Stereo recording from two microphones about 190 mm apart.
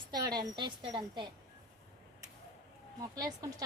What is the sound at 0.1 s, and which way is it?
Speech, 20° right (ahead or behind).